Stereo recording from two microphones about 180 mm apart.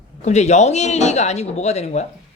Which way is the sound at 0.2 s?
40° left (ahead or behind).